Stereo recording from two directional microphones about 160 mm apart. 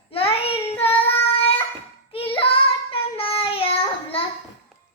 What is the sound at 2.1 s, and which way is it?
Child singing, 35° left (ahead or behind).